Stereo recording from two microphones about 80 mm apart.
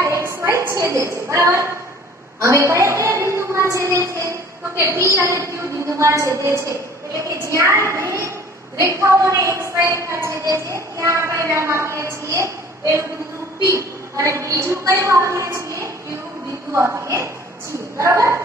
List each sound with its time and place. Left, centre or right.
0.0 s a woman's voice: right
13.7 s a woman's voice: right